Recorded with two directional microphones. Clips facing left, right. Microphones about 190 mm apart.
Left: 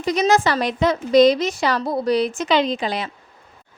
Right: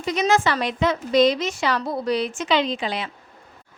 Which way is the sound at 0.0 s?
40° left (ahead or behind).